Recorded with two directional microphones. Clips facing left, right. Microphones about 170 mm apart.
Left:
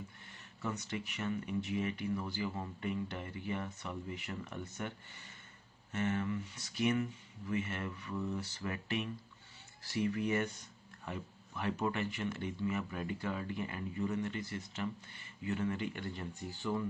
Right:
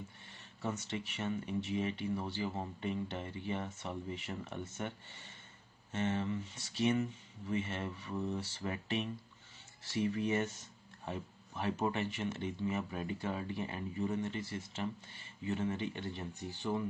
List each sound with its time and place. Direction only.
0.3 s speech: 25° right (ahead or behind)